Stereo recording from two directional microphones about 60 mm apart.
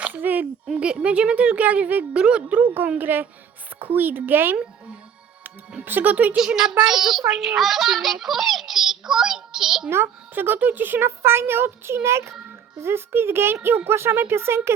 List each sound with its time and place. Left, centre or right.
0.0 s a sound: right
0.7 s a woman's voice: centre
3.0 s a child's voice: right
4.5 s a woman's voice: centre
5.8 s a child's voice: right
6.3 s a child's voice: centre
9.9 s a child's voice: right